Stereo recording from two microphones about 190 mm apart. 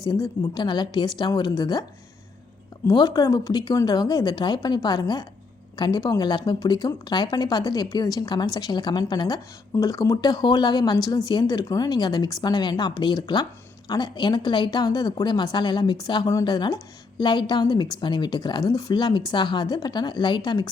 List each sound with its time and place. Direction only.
0.0 s speech: 20° left (ahead or behind)
2.8 s speech: 20° left (ahead or behind)